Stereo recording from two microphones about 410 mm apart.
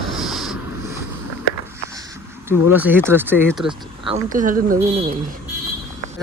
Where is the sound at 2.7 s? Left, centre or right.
Centre.